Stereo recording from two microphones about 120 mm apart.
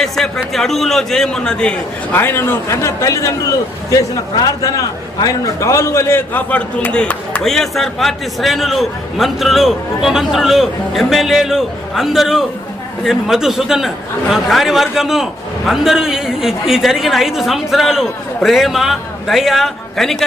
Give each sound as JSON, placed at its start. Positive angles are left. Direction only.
{"t": 0.2, "sound": "a man's voice", "side_deg": 0}